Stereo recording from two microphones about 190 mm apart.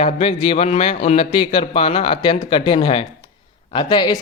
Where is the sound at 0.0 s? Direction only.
30° left (ahead or behind).